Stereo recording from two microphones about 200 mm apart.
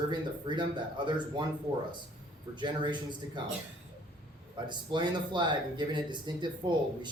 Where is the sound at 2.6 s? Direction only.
25° right (ahead or behind).